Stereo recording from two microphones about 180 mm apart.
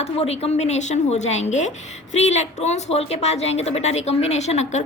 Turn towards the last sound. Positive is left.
turn(degrees=40)  # may be behind; listen again after turning